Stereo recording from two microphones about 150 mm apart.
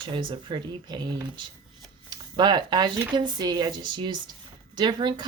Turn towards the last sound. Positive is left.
turn(degrees=-30)  # may be behind; listen again after turning